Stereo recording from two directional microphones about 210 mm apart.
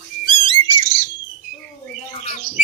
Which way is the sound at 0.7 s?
40° right (ahead or behind).